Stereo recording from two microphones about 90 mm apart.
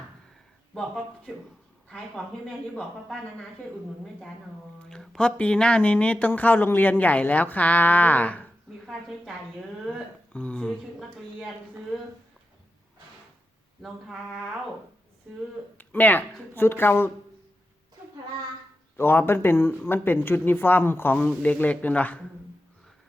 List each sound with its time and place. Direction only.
0.7 s speech: 5° left (ahead or behind)
4.9 s speech: 10° left (ahead or behind)
8.9 s a sound: centre (ahead or behind)
10.3 s speech: 10° left (ahead or behind)
15.8 s speech: 20° left (ahead or behind)
18.9 s speech: 25° left (ahead or behind)